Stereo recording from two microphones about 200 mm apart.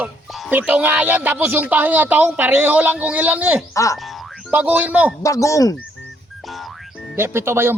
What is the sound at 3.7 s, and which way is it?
Speech, 15° left (ahead or behind).